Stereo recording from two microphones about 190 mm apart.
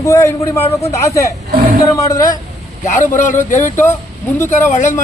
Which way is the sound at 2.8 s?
40° left (ahead or behind).